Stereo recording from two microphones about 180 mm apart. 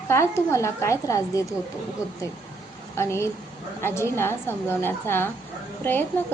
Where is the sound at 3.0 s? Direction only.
15° left (ahead or behind).